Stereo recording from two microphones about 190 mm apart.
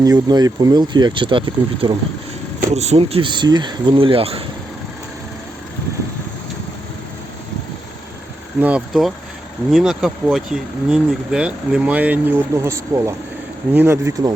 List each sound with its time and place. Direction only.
0.0 s speech: 20° right (ahead or behind)
8.6 s speech: 5° right (ahead or behind)